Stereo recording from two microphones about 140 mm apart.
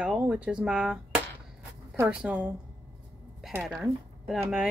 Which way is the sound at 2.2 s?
5° right (ahead or behind).